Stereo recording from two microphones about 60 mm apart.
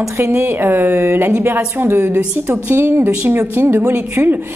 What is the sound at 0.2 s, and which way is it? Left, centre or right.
A woman's voice, right.